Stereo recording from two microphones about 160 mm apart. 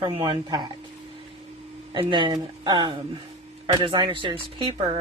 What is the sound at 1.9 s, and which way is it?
Speech, 30° right (ahead or behind).